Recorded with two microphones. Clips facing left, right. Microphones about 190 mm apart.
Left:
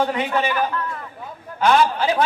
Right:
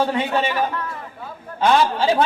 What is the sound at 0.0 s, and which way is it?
Speech, 25° right (ahead or behind).